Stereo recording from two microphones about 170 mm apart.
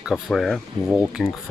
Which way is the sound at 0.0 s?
Centre (ahead or behind).